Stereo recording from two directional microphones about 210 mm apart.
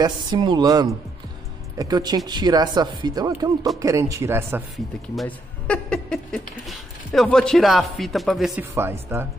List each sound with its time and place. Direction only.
0.0 s a woman's voice: 20° right (ahead or behind)
5.1 s speech: 5° left (ahead or behind)
8.7 s speech: 10° right (ahead or behind)